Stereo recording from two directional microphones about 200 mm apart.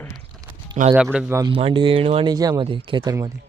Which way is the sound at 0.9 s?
10° right (ahead or behind).